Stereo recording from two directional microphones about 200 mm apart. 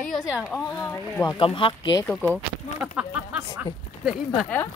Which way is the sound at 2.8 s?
5° right (ahead or behind).